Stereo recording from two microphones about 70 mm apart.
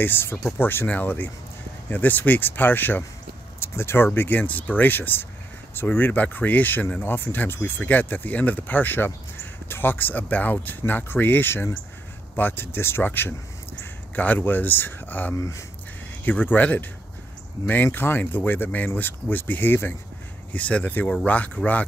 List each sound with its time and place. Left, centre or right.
0.0 s speech: left
15.3 s speech: left
16.3 s speech: left
20.5 s speech: centre